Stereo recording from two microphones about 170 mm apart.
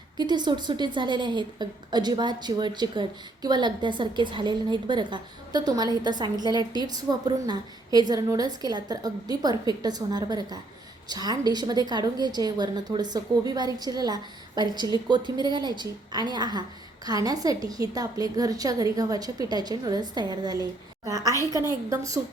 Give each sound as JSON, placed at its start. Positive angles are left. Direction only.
{"t": 0.2, "sound": "a woman's voice", "side_deg": -25}